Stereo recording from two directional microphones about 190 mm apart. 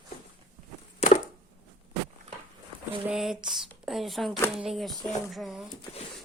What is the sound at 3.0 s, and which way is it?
Speech, centre (ahead or behind).